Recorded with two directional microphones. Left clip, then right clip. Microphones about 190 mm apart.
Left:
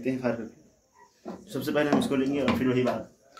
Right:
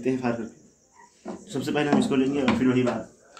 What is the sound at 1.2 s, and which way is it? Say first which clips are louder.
Speech: right 3 dB; 15° right (ahead or behind).